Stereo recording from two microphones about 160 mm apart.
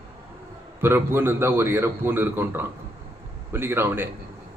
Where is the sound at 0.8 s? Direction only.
15° right (ahead or behind).